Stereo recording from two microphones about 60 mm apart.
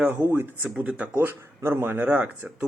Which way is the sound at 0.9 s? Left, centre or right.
Right.